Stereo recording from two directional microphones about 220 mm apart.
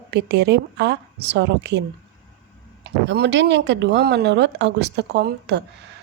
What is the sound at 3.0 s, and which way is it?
A woman's voice, 50° right (ahead or behind).